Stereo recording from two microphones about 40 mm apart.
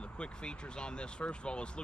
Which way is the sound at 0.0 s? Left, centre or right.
Left.